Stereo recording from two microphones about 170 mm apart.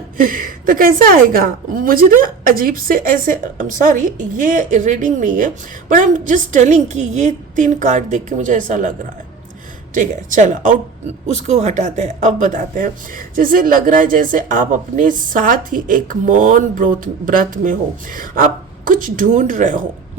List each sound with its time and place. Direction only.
0.2 s speech: 55° right (ahead or behind)
9.9 s speech: 45° right (ahead or behind)